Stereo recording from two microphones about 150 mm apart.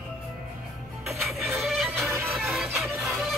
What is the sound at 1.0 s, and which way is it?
Music, centre (ahead or behind).